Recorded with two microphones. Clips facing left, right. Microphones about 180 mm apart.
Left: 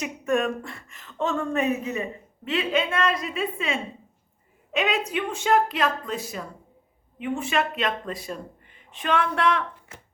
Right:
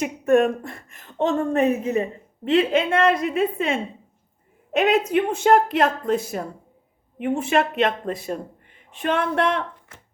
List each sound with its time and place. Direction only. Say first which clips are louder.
0.0 s speech: right 7 dB; 55° right (ahead or behind)
1.3 s a woman's voice: right 5 dB; 40° right (ahead or behind)
2.5 s a woman's voice: right 6 dB; 55° right (ahead or behind)